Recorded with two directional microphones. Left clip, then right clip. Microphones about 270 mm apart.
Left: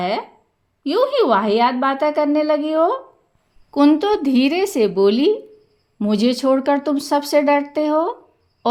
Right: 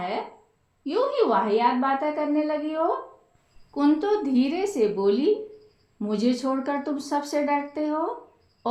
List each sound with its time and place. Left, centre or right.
0.9 s speech: left